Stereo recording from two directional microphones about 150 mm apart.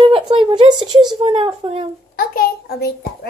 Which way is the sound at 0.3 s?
30° right (ahead or behind).